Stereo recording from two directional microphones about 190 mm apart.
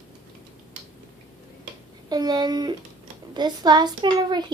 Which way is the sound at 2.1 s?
20° right (ahead or behind).